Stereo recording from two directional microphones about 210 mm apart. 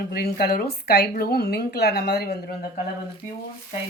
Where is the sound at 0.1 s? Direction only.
50° left (ahead or behind).